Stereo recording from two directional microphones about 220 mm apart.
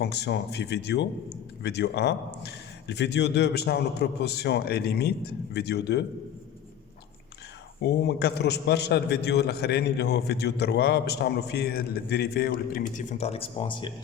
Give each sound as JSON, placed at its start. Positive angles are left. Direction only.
{"t": 0.0, "sound": "a man's voice", "side_deg": 50}
{"t": 7.8, "sound": "a man's voice", "side_deg": 50}